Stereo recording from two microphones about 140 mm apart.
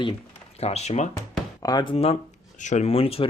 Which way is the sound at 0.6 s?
50° left (ahead or behind).